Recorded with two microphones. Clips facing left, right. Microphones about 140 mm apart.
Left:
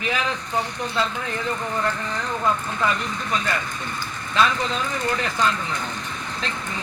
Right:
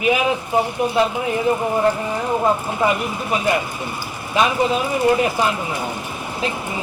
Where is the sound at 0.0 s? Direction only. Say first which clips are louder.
Right 8 dB; 15° right (ahead or behind).